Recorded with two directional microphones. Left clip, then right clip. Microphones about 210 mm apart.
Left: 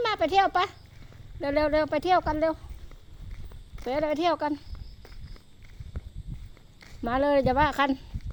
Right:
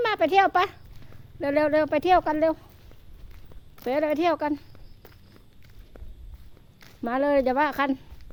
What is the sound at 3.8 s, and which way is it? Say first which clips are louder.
Speech: right 2 dB; 20° right (ahead or behind).